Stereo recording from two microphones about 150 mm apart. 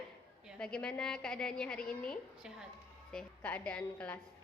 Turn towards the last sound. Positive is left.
turn(degrees=10)  # may be behind; listen again after turning